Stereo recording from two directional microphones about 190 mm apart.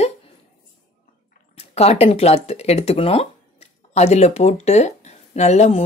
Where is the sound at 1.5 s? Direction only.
35° left (ahead or behind).